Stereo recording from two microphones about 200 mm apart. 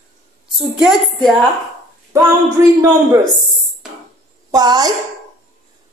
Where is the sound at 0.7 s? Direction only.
Centre (ahead or behind).